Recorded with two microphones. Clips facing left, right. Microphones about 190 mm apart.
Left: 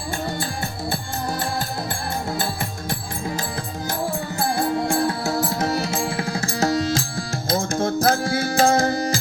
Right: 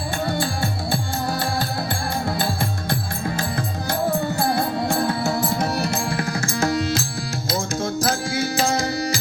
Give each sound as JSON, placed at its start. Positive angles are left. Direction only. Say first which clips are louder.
{"t": 5.2, "sound": "music", "louder": "right 1 dB", "side_deg": 0}
{"t": 6.1, "sound": "tabla", "louder": "right 1 dB", "side_deg": 25}
{"t": 7.5, "sound": "music", "louder": "left 3 dB", "side_deg": 55}